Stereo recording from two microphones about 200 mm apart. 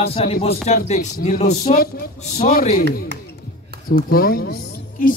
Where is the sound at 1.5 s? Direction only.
50° left (ahead or behind).